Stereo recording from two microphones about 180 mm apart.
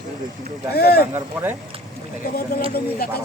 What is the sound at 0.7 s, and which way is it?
Speech, 60° left (ahead or behind).